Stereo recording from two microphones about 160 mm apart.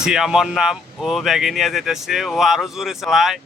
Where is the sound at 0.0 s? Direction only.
5° right (ahead or behind).